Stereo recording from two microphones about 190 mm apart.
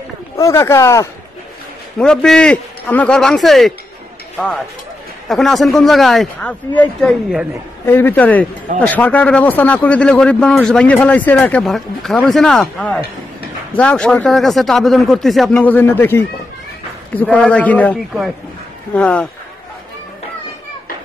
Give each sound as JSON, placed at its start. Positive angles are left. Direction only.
{"t": 0.4, "sound": "speech", "side_deg": 15}
{"t": 2.0, "sound": "speech", "side_deg": 5}
{"t": 5.3, "sound": "speech", "side_deg": 0}